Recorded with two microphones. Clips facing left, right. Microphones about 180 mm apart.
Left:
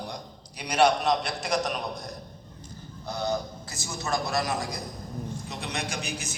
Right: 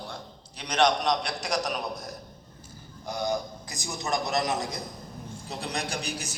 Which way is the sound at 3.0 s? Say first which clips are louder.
Even; 10° right (ahead or behind).